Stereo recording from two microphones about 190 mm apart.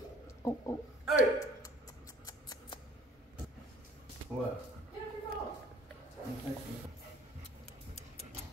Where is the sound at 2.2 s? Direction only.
20° left (ahead or behind).